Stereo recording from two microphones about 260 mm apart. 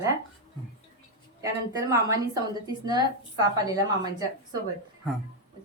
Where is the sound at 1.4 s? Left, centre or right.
Centre.